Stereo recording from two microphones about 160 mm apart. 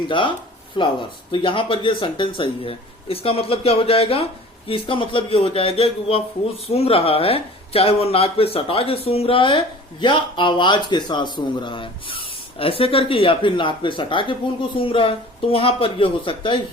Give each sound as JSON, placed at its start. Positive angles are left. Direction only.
{"t": 0.1, "sound": "a man's voice", "side_deg": 30}